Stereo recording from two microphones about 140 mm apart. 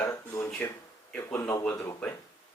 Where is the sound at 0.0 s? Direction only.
20° left (ahead or behind).